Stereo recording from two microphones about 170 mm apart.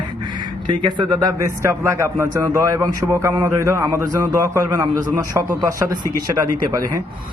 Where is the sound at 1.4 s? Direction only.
15° right (ahead or behind).